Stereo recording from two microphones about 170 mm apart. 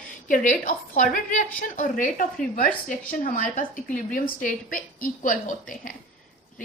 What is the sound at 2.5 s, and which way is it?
A woman's voice, 50° left (ahead or behind).